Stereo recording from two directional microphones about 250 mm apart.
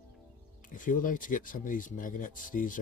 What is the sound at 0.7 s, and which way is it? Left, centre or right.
Speech, left.